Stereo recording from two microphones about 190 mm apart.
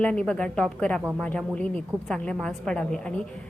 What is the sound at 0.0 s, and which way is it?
A man's voice, 5° left (ahead or behind).